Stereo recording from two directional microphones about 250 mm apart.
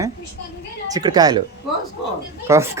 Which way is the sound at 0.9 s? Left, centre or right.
Centre.